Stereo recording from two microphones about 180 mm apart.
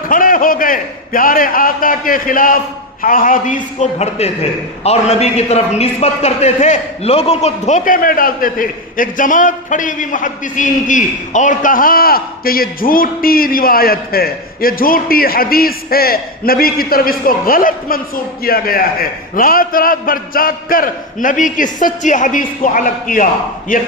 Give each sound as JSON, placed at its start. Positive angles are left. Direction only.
{"t": 0.1, "sound": "a man's voice", "side_deg": 50}